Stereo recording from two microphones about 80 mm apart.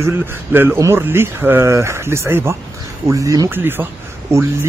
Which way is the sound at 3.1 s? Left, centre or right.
Right.